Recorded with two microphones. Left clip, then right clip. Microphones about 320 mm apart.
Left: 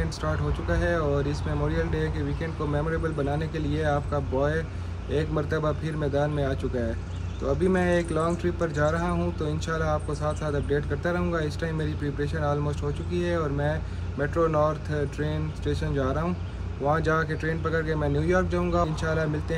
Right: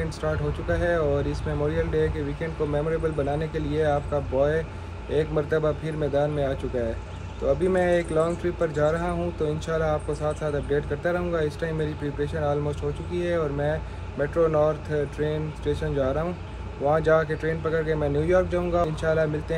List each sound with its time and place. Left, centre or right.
0.2 s speech: centre
3.3 s speech: centre